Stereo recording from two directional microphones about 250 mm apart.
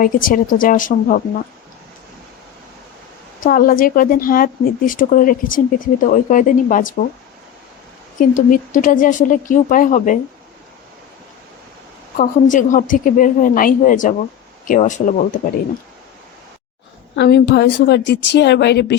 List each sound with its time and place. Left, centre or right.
0.0 s speech: left
3.4 s speech: left
8.2 s speech: left
12.1 s speech: left
17.2 s speech: left